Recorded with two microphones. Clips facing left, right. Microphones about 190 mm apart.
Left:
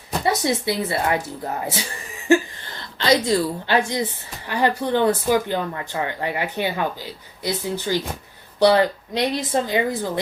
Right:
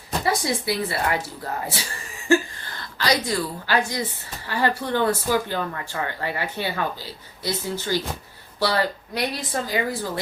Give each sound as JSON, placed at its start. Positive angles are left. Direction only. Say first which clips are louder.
{"t": 0.3, "sound": "speech", "louder": "left 3 dB", "side_deg": 25}
{"t": 2.3, "sound": "a sound", "louder": "left 2 dB", "side_deg": 20}
{"t": 3.2, "sound": "speech", "louder": "left 5 dB", "side_deg": 25}